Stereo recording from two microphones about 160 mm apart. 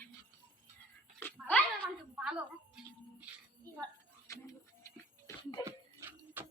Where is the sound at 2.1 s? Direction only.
5° right (ahead or behind).